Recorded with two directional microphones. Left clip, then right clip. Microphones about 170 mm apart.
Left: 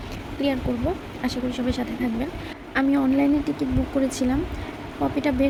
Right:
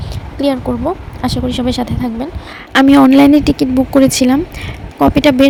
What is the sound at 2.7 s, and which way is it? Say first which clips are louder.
Speech: right 14 dB; 55° right (ahead or behind).